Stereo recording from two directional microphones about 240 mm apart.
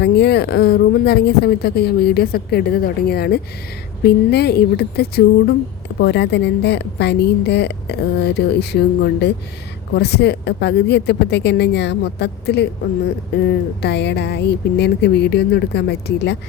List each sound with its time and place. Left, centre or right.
0.0 s a woman's voice: left
13.8 s a woman's voice: left